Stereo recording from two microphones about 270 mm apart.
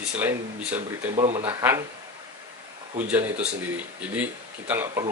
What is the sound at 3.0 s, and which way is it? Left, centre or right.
Speech, centre.